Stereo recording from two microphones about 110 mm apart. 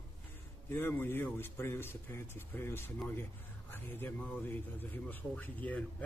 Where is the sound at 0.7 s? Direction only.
20° left (ahead or behind).